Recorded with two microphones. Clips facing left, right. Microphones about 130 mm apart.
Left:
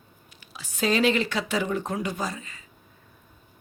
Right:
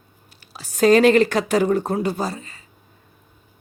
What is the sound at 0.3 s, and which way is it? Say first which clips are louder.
Speech: right 9 dB; 35° right (ahead or behind).